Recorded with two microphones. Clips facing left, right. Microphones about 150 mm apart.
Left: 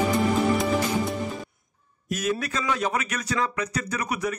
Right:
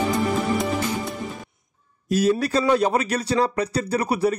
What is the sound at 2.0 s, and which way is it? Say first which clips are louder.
A man's voice: right 7 dB; 30° right (ahead or behind).